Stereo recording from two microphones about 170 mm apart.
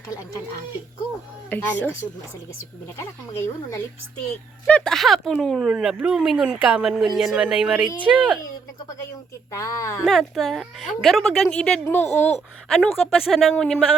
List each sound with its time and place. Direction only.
1.5 s speech: 10° left (ahead or behind)
3.0 s speech: 15° left (ahead or behind)
4.6 s speech: 5° left (ahead or behind)
9.5 s speech: 20° left (ahead or behind)
10.1 s speech: centre (ahead or behind)